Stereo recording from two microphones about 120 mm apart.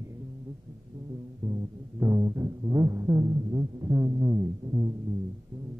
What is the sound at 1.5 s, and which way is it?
Music, 25° right (ahead or behind).